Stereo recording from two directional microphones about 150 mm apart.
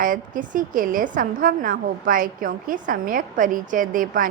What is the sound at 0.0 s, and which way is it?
A woman's voice, 65° right (ahead or behind).